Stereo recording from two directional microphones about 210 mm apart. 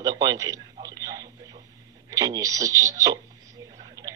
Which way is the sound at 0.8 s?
15° right (ahead or behind).